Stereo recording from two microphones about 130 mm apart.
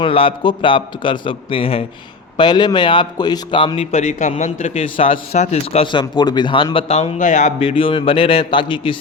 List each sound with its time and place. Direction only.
0.0 s a man's voice: 45° left (ahead or behind)
2.4 s a man's voice: 35° left (ahead or behind)
3.9 s a man's voice: 65° left (ahead or behind)
4.7 s a man's voice: 45° left (ahead or behind)
7.2 s speech: 80° left
7.8 s a man's voice: 45° left (ahead or behind)